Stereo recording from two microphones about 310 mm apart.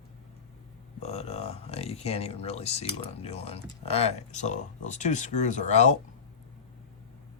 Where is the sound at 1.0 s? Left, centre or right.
Left.